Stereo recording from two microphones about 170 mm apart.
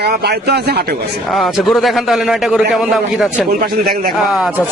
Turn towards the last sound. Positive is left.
turn(degrees=0)  # may be behind; listen again after turning